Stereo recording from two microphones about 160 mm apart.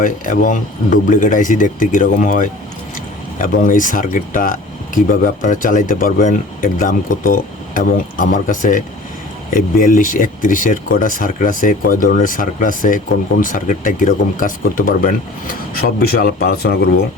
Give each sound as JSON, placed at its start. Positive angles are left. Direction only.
{"t": 0.0, "sound": "speech", "side_deg": 55}
{"t": 15.8, "sound": "speech", "side_deg": 75}